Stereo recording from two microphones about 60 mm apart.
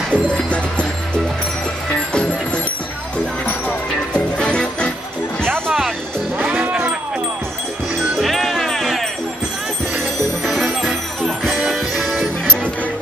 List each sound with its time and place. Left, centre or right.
0.1 s music: left
5.7 s music: centre
6.3 s music: right
8.2 s music: centre
10.4 s music: centre